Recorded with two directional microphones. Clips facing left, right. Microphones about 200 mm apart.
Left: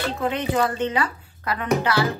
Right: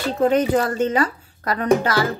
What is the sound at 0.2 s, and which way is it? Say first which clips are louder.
Speech: right 7 dB; 40° right (ahead or behind).